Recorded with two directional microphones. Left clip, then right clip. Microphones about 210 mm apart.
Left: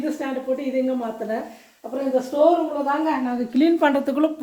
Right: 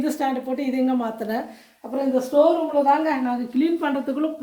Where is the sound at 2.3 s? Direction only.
45° right (ahead or behind).